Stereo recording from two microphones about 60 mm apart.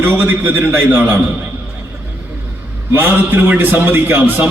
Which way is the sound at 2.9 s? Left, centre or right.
Right.